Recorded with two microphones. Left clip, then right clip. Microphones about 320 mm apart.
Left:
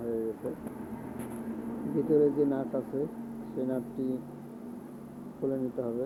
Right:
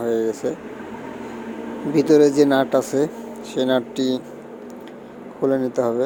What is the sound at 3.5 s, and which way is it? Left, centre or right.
Speech, right.